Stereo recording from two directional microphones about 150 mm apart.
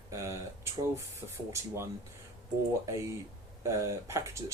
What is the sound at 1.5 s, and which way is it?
Speech, 20° right (ahead or behind).